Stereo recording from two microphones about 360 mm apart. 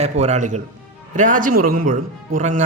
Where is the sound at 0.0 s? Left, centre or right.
Centre.